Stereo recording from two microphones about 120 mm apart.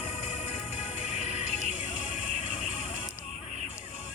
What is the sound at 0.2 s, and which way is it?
Music, 70° left (ahead or behind).